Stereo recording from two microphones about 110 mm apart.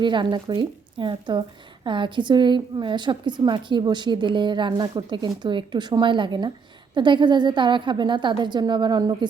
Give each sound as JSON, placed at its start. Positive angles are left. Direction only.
{"t": 0.0, "sound": "a woman's voice", "side_deg": -45}